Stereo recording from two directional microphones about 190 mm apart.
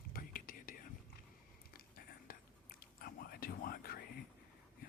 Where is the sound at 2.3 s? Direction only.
50° left (ahead or behind).